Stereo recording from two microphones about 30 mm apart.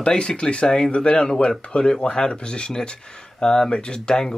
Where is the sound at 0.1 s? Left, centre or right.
Left.